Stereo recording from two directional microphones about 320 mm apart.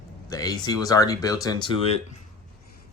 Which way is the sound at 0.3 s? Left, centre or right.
Centre.